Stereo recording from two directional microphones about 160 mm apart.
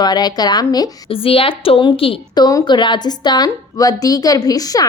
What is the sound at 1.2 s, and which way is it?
A woman's voice, 35° left (ahead or behind).